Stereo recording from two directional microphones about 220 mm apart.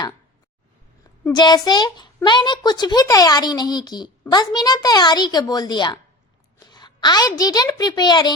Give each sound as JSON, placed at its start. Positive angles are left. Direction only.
{"t": 1.2, "sound": "a child's voice", "side_deg": 20}